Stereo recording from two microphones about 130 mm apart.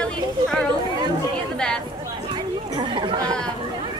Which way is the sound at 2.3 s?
40° right (ahead or behind).